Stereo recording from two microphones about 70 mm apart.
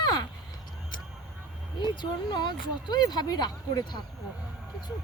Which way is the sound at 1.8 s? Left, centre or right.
Left.